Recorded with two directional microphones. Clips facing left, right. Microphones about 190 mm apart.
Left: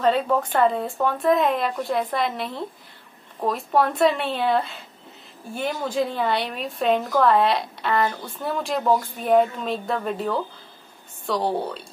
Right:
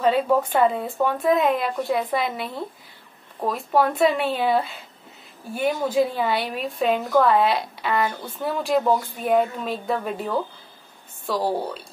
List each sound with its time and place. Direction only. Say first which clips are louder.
0.0 s a woman's voice: right 1 dB; 5° right (ahead or behind)